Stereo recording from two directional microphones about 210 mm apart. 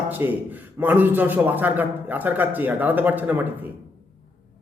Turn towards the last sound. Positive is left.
turn(degrees=-10)  # may be behind; listen again after turning